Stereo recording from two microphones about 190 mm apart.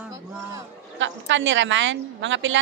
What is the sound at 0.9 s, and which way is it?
A woman's voice, 75° right (ahead or behind).